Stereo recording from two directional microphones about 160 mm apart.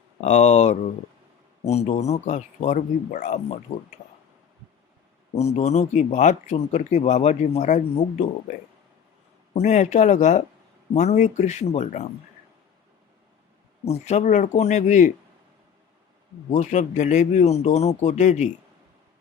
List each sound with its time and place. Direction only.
0.2 s speech: 45° left (ahead or behind)
5.3 s speech: 40° left (ahead or behind)
9.6 s speech: 50° left (ahead or behind)
13.8 s speech: 45° left (ahead or behind)
16.5 s speech: 50° left (ahead or behind)